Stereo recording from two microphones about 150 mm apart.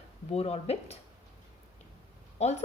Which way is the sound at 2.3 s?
45° left (ahead or behind).